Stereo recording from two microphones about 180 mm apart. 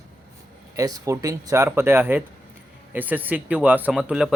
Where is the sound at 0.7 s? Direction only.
20° right (ahead or behind).